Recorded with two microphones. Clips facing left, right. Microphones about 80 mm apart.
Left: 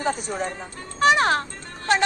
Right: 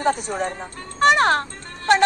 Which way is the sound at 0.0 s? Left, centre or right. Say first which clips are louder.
Right 4 dB; right.